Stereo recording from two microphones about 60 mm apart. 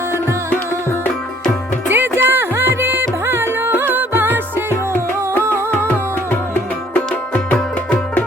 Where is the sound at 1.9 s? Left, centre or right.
Right.